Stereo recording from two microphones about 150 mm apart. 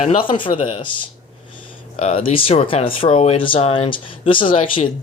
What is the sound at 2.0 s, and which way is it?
Speech, 45° left (ahead or behind).